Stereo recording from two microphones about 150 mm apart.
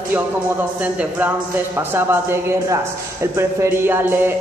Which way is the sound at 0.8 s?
10° right (ahead or behind).